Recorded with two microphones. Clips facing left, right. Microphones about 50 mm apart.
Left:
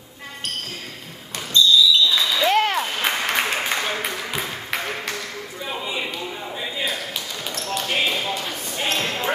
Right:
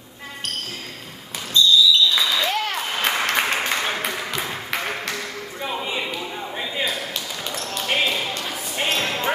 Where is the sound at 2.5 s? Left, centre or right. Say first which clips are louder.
Left 6 dB; left.